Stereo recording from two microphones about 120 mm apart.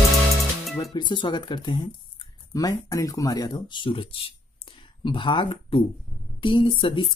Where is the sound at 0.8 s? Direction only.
35° left (ahead or behind).